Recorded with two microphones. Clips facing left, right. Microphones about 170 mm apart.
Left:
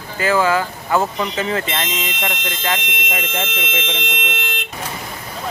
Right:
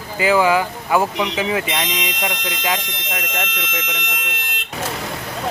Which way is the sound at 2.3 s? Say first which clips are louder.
Even; 25° left (ahead or behind).